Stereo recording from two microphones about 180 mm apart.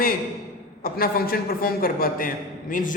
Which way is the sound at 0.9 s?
55° left (ahead or behind).